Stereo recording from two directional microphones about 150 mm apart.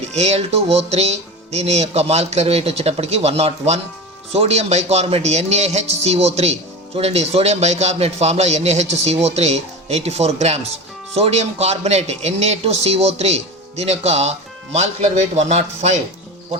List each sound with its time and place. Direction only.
0.1 s speech: 45° right (ahead or behind)